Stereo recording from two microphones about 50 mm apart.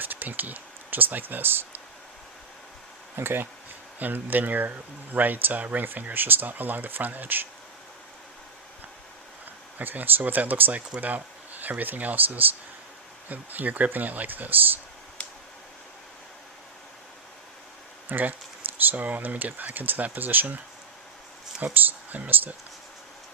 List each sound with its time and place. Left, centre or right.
0.0 s speech: right
3.2 s speech: right
4.0 s speech: right
9.7 s speech: right
18.1 s speech: right
21.6 s speech: right